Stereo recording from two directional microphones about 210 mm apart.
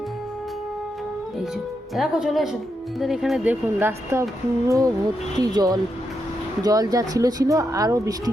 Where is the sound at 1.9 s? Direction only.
Centre (ahead or behind).